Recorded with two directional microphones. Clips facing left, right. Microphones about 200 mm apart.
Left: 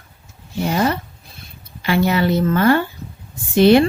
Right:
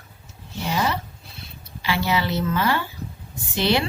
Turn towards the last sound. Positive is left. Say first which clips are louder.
# left 11 dB
turn(degrees=50)  # may be behind; listen again after turning